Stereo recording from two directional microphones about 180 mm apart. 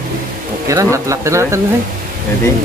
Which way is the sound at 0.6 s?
15° right (ahead or behind).